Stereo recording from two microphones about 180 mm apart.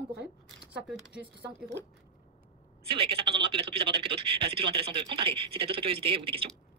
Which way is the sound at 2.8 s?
30° right (ahead or behind).